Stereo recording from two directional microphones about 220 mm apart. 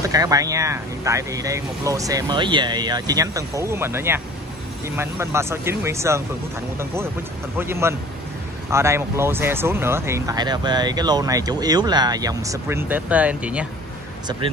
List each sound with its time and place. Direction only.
0.0 s speech: 15° right (ahead or behind)
7.5 s speech: 10° right (ahead or behind)